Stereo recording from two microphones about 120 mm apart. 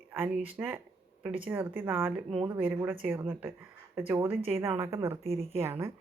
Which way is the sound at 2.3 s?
50° right (ahead or behind).